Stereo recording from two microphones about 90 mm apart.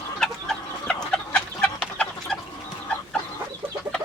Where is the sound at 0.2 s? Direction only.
10° left (ahead or behind).